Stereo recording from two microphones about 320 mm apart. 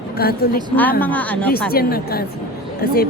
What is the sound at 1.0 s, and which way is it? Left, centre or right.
Speech, centre.